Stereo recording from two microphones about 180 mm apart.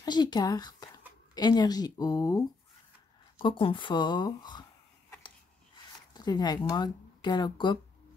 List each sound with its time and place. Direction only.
0.0 s speech: 25° left (ahead or behind)
6.1 s speech: 25° left (ahead or behind)